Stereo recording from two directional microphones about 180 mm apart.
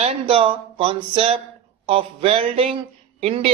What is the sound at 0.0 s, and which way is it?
A man's voice, 35° right (ahead or behind).